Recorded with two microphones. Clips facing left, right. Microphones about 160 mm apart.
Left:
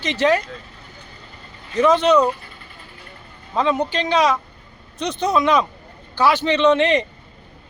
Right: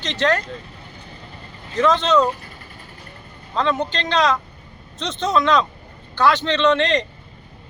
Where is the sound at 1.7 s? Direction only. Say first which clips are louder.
Left 2 dB; 15° left (ahead or behind).